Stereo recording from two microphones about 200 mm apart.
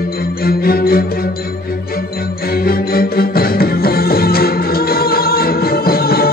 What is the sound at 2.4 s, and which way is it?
Music, 50° left (ahead or behind).